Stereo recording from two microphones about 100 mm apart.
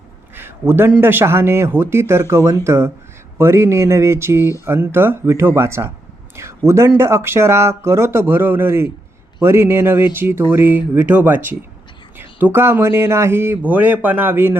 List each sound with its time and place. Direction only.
0.7 s speech: 15° right (ahead or behind)